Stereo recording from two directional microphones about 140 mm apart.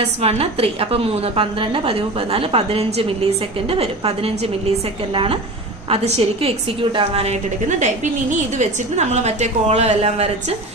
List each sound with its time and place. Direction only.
0.0 s a woman's voice: 45° right (ahead or behind)
8.5 s a woman's voice: 55° right (ahead or behind)